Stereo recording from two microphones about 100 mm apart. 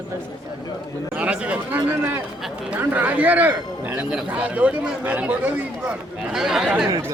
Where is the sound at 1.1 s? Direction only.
15° right (ahead or behind).